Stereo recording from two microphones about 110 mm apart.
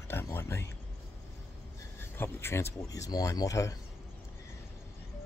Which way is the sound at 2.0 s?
20° left (ahead or behind).